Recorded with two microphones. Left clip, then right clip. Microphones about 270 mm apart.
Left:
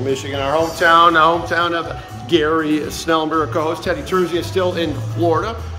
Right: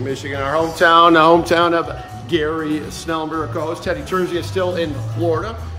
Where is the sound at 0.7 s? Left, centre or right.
Right.